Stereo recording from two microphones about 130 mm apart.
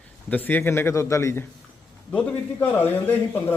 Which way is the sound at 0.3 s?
15° left (ahead or behind).